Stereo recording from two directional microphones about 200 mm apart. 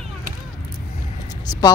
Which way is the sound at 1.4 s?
20° left (ahead or behind).